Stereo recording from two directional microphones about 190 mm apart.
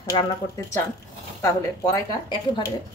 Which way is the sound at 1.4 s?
20° left (ahead or behind).